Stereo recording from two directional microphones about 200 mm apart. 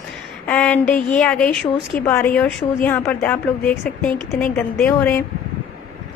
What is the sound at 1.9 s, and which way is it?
Speech, 45° left (ahead or behind).